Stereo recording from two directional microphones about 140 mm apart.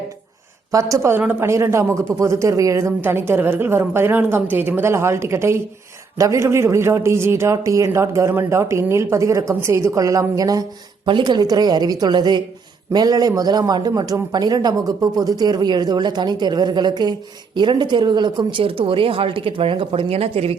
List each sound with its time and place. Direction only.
0.7 s a man's voice: 25° right (ahead or behind); by 20.6 s 45° right (ahead or behind)